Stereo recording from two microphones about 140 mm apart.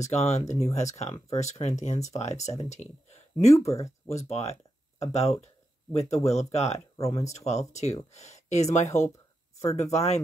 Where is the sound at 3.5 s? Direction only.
20° left (ahead or behind).